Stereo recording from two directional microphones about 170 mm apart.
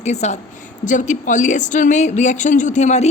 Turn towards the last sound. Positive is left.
turn(degrees=45)  # may be behind; listen again after turning